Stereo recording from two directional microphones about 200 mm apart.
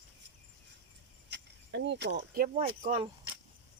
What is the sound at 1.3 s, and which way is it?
Speech, 60° right (ahead or behind).